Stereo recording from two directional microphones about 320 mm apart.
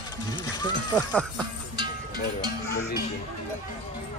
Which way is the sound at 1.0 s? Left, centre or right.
Centre.